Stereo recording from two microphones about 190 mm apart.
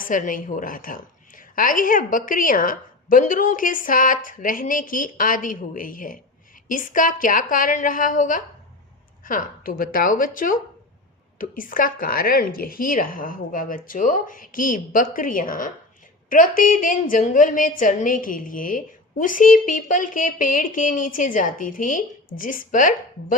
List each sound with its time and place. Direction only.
0.0 s a woman's voice: 45° left (ahead or behind)